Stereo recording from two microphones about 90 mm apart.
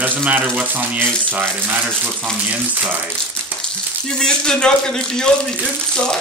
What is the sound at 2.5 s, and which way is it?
Speech, 20° right (ahead or behind).